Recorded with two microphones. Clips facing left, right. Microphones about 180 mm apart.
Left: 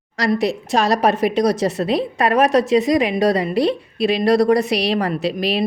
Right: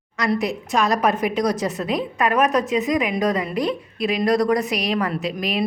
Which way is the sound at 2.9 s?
30° left (ahead or behind).